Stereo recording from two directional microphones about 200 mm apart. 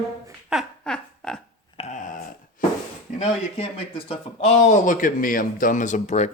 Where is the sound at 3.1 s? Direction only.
30° left (ahead or behind).